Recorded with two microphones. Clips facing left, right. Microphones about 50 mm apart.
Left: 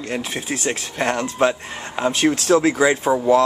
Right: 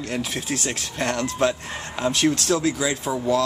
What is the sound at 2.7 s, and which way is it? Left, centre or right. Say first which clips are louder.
Speech: left 8 dB; left.